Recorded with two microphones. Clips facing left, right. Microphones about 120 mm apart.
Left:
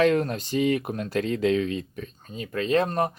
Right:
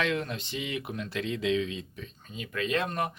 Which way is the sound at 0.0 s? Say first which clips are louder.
Left 9 dB; 45° left (ahead or behind).